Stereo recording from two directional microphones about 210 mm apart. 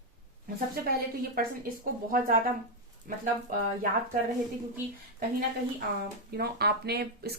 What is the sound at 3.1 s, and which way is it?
Speech, 40° right (ahead or behind).